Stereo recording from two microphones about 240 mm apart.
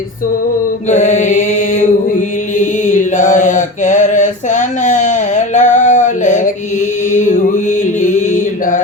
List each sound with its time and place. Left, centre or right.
0.9 s mantra: left
5.5 s a sound: left
7.1 s music: left